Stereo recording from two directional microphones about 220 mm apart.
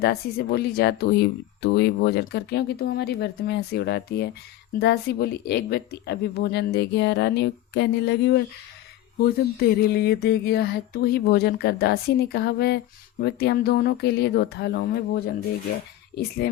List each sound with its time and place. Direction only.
0.0 s speech: 45° left (ahead or behind)